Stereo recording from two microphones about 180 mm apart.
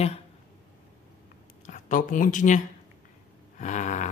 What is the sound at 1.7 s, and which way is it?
Speech, 45° left (ahead or behind).